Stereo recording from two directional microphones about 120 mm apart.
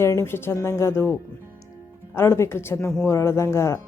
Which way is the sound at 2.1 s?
20° left (ahead or behind).